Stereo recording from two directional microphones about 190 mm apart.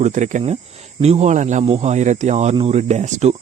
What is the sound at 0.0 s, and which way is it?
Speech, 40° right (ahead or behind).